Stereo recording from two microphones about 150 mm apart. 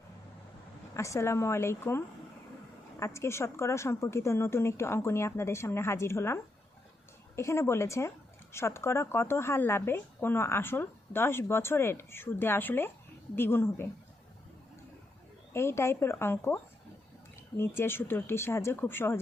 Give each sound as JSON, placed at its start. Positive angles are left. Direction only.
{"t": 0.9, "sound": "speech", "side_deg": 20}
{"t": 15.5, "sound": "speech", "side_deg": 15}